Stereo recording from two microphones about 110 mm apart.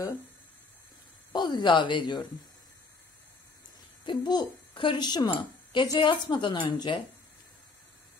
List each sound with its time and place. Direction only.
1.3 s a child's voice: 40° left (ahead or behind)
4.0 s a child's voice: 45° left (ahead or behind)